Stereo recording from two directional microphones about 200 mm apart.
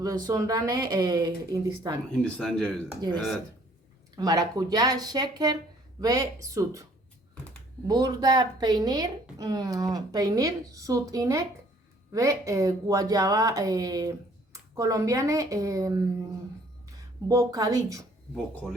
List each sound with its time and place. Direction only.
0.0 s speech: 20° right (ahead or behind)
2.3 s speech: 5° left (ahead or behind)
4.1 s speech: 20° right (ahead or behind)
7.9 s speech: 20° right (ahead or behind)
17.2 s speech: 15° right (ahead or behind)